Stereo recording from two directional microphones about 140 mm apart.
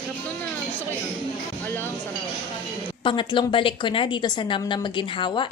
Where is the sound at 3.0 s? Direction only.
35° left (ahead or behind).